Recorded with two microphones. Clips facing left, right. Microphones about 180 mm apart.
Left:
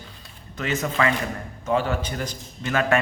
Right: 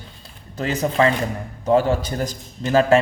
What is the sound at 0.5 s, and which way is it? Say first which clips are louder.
A man's voice: right 5 dB; 35° right (ahead or behind).